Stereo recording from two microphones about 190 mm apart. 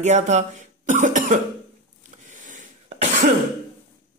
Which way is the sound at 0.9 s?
40° right (ahead or behind).